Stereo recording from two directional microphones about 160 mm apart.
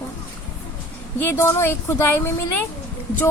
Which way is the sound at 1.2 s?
15° left (ahead or behind).